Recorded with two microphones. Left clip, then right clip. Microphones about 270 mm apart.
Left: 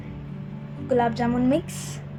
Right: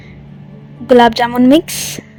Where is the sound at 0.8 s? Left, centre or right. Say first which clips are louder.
Right 14 dB; right.